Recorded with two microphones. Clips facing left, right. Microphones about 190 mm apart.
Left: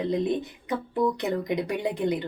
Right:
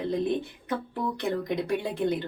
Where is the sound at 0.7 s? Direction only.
15° left (ahead or behind).